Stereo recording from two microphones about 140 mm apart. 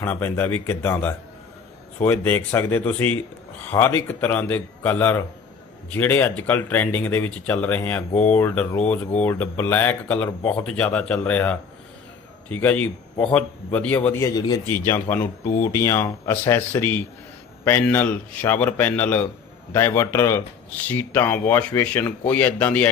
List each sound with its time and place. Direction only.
0.0 s speech: 15° left (ahead or behind)